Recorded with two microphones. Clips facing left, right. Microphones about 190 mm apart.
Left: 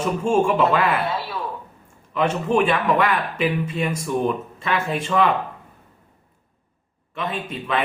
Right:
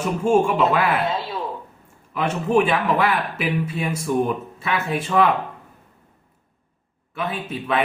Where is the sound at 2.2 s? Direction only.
5° right (ahead or behind).